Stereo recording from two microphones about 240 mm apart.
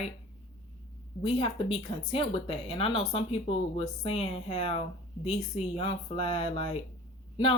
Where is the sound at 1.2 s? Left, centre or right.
Left.